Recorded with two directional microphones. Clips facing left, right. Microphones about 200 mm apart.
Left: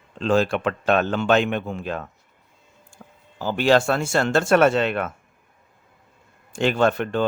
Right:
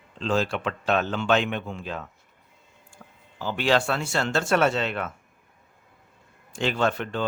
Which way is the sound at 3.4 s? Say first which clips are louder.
Left 5 dB; 45° left (ahead or behind).